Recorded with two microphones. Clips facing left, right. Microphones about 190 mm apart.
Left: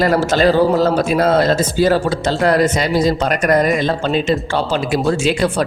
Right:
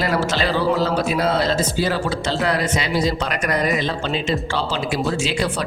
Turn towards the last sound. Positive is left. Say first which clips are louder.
# left 6 dB
turn(degrees=50)  # may be behind; listen again after turning